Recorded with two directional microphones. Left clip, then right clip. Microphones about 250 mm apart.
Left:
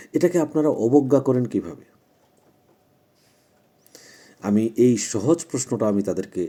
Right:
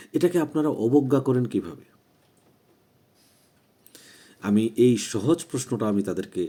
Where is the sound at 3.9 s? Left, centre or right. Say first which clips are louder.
Left 3 dB; centre.